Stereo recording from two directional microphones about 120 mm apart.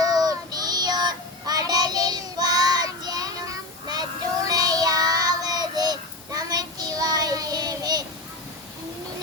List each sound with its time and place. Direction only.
0.0 s child singing: 30° right (ahead or behind)